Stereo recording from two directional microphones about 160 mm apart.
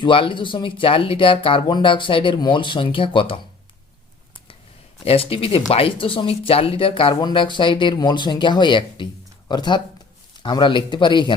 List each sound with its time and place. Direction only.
0.0 s speech: 30° left (ahead or behind)
5.0 s speech: 35° left (ahead or behind)